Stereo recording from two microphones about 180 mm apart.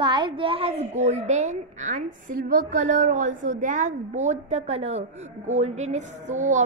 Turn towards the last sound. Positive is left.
turn(degrees=-40)  # may be behind; listen again after turning